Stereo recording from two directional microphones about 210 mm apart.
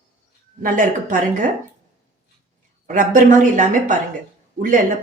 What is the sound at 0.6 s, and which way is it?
Speech, 40° right (ahead or behind).